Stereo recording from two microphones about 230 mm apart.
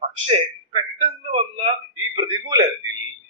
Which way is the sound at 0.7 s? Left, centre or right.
Right.